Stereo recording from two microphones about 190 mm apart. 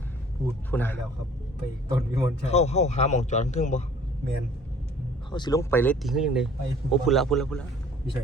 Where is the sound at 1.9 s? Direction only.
15° right (ahead or behind).